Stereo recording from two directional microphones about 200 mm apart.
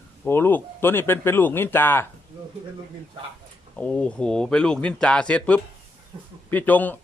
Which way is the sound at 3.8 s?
5° left (ahead or behind).